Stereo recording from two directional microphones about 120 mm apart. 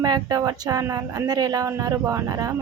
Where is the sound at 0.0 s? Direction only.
35° right (ahead or behind).